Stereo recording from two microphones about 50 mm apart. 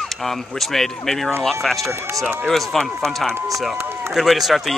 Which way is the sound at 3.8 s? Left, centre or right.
Right.